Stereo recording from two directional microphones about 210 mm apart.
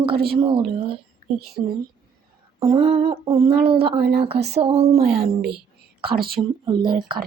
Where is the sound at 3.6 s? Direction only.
50° right (ahead or behind).